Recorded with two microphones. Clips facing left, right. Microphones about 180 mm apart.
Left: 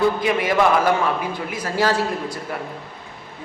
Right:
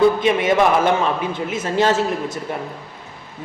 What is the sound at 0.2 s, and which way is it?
A man's voice, 25° right (ahead or behind).